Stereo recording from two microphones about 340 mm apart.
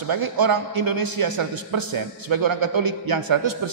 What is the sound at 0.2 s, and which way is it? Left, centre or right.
A man's voice, right.